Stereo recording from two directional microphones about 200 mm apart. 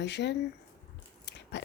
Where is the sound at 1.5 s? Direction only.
60° left (ahead or behind).